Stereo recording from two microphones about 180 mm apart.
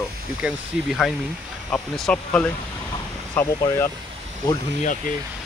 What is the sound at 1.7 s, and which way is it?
Speech, 5° left (ahead or behind).